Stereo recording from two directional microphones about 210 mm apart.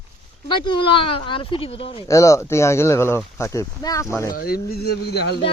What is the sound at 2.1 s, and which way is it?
Speech, 15° left (ahead or behind).